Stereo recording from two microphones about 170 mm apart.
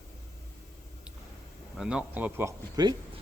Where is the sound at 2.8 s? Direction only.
25° right (ahead or behind).